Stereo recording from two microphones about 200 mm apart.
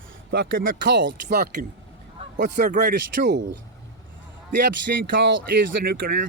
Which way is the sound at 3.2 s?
60° right (ahead or behind).